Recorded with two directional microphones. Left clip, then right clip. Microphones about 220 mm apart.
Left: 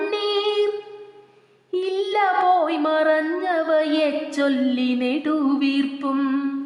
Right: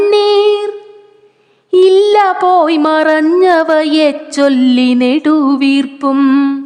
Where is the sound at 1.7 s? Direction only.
50° right (ahead or behind).